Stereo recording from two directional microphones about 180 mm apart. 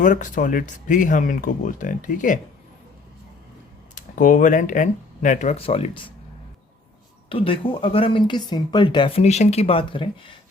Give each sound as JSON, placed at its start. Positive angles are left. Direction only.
{"t": 0.0, "sound": "speech", "side_deg": 45}
{"t": 3.9, "sound": "speech", "side_deg": 45}
{"t": 7.3, "sound": "speech", "side_deg": 30}